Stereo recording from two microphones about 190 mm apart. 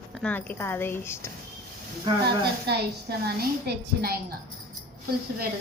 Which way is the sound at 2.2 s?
55° right (ahead or behind).